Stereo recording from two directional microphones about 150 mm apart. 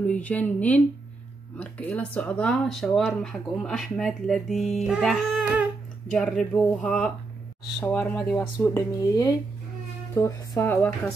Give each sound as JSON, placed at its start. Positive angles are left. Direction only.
{"t": 0.0, "sound": "speech", "side_deg": 10}
{"t": 8.6, "sound": "speech", "side_deg": 20}